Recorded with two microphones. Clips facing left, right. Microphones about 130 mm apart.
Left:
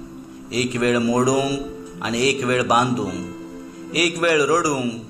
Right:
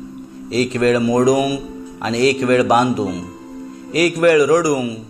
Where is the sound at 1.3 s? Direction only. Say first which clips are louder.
Right 4 dB; 20° right (ahead or behind).